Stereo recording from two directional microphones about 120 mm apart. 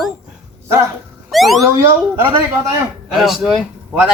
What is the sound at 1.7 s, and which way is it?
Speech, 20° right (ahead or behind).